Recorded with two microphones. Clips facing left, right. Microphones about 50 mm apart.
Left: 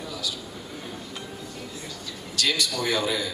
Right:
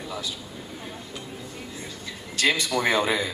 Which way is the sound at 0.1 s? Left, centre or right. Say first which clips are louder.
Right 1 dB; right.